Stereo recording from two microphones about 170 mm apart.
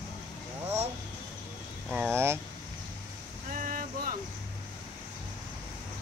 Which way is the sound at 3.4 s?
55° right (ahead or behind).